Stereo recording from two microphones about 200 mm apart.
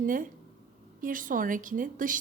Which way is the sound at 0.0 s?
45° right (ahead or behind).